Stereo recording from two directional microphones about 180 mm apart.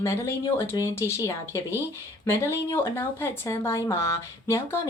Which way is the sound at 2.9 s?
15° left (ahead or behind).